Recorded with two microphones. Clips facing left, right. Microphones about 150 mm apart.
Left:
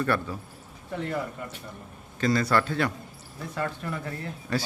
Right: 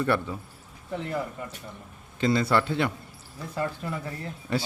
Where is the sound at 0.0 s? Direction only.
20° right (ahead or behind).